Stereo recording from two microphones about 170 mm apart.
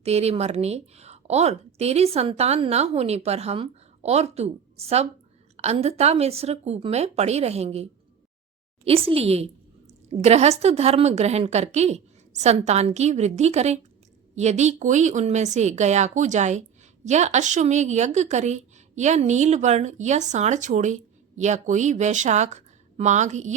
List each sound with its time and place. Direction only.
0.0 s a woman's voice: 40° right (ahead or behind)